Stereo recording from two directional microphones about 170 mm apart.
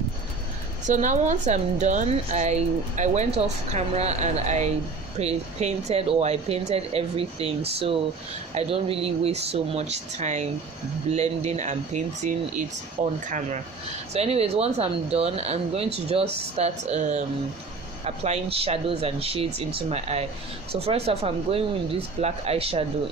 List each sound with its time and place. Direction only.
0.8 s a woman's voice: 45° right (ahead or behind)